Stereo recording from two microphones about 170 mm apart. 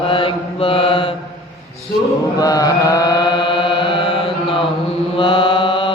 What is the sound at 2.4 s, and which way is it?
Chant, 20° left (ahead or behind).